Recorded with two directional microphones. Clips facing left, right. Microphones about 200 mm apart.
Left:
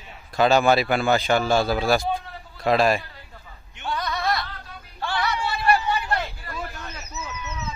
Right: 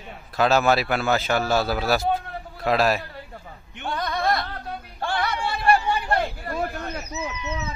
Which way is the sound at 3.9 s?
50° right (ahead or behind).